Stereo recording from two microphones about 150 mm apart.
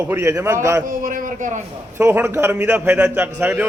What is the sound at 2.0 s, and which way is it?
A man's voice, 15° right (ahead or behind).